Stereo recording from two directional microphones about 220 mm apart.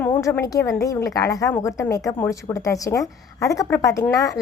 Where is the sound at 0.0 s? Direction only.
10° left (ahead or behind).